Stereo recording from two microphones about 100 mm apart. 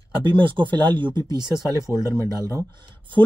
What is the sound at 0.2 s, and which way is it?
Speech, 55° right (ahead or behind).